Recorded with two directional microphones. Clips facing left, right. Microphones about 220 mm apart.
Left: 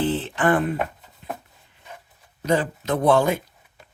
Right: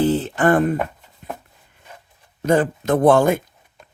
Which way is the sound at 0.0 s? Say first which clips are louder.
Right 5 dB; 40° right (ahead or behind).